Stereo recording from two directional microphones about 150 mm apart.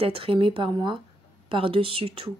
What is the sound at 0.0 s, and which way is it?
A woman's voice, 40° right (ahead or behind).